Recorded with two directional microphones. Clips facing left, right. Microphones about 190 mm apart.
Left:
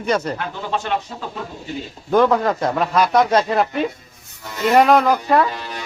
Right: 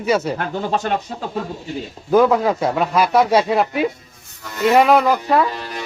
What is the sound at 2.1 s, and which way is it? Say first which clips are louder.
Speech: right 1 dB; 5° right (ahead or behind).